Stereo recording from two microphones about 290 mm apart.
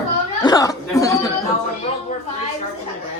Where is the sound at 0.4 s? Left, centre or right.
Centre.